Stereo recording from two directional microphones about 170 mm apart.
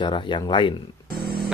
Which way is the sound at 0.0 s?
30° left (ahead or behind).